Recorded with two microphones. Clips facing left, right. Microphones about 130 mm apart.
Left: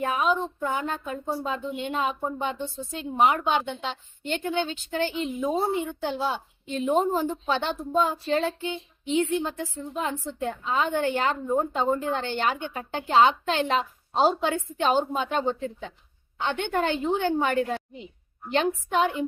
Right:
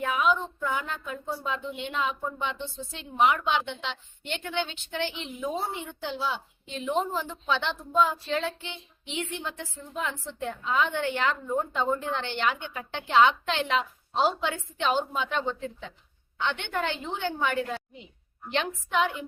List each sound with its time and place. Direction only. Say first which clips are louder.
0.0 s a woman's voice: left 1 dB; 40° left (ahead or behind)